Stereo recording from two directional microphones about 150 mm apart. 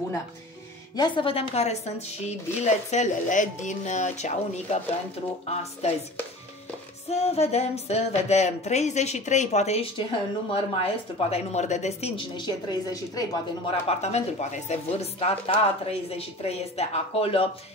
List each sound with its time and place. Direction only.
0.9 s a woman's voice: 30° left (ahead or behind)
7.1 s a woman's voice: 45° left (ahead or behind)
12.4 s a woman's voice: 25° left (ahead or behind)
13.7 s a woman's voice: 45° left (ahead or behind)